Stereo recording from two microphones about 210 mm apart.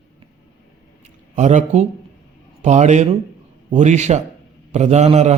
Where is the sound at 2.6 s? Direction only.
35° right (ahead or behind).